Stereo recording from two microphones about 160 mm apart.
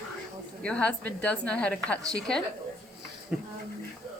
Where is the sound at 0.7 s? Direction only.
10° left (ahead or behind).